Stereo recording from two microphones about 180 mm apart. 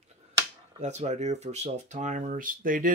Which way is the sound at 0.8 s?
40° right (ahead or behind).